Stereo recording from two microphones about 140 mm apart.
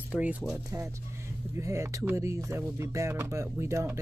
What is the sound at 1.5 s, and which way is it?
Speech, 20° right (ahead or behind).